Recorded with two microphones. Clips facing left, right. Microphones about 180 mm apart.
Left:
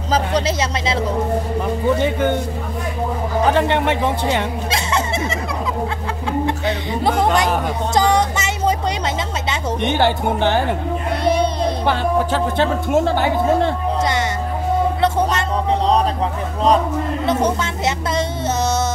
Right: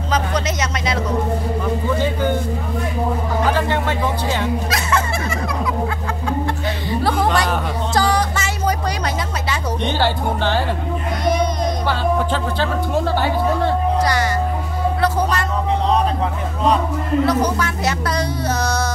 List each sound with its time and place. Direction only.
0.1 s speech: 30° left (ahead or behind)
3.7 s speech: 25° left (ahead or behind)
6.9 s a sound: 20° left (ahead or behind)
9.5 s speech: 20° left (ahead or behind)
11.2 s child singing: 30° left (ahead or behind)
12.5 s speech: 20° left (ahead or behind)
15.0 s a sound: 25° left (ahead or behind)
17.3 s speech: 25° left (ahead or behind)